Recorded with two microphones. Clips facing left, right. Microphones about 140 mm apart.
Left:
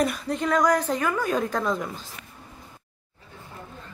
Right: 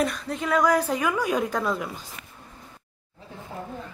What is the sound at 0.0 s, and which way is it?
Speech, centre (ahead or behind).